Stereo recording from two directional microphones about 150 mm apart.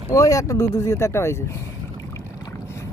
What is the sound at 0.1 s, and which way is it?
Speech, 20° left (ahead or behind).